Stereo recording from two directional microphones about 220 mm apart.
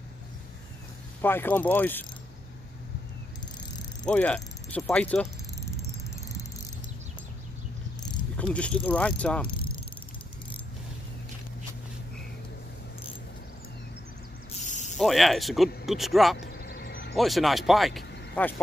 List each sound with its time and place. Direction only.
1.2 s mechanisms: 10° left (ahead or behind)
4.0 s a sound: 5° left (ahead or behind)
8.4 s speech: 5° left (ahead or behind)
14.5 s a sound: 35° left (ahead or behind)
15.0 s speech: centre (ahead or behind)
16.3 s vehicle: 45° left (ahead or behind)
17.1 s speech: centre (ahead or behind)